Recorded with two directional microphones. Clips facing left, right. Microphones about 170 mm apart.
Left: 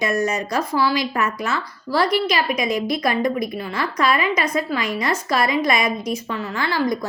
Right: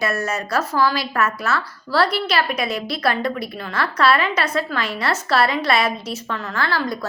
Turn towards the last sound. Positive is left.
turn(degrees=15)  # may be behind; listen again after turning